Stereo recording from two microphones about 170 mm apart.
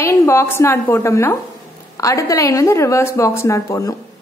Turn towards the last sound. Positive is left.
turn(degrees=20)  # may be behind; listen again after turning